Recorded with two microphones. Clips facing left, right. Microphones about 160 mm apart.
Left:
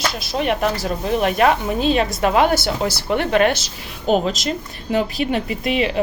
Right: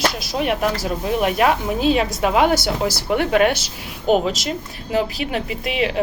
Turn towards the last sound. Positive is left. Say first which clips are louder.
# left 2 dB
turn(degrees=-5)  # may be behind; listen again after turning